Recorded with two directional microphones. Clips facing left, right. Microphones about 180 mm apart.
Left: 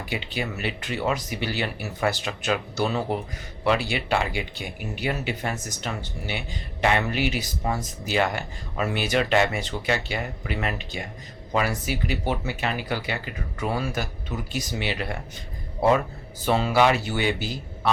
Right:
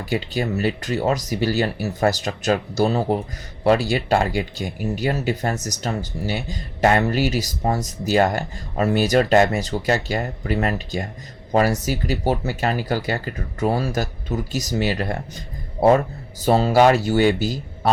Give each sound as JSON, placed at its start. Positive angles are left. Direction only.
{"t": 0.0, "sound": "a man's voice", "side_deg": -40}